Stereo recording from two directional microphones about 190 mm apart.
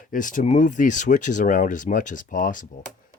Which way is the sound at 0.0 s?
45° left (ahead or behind).